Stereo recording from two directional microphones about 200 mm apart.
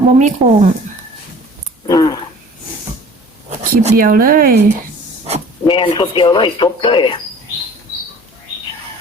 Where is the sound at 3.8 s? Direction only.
45° right (ahead or behind).